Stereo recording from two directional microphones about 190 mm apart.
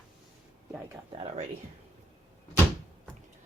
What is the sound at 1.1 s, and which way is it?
Speech, 30° right (ahead or behind).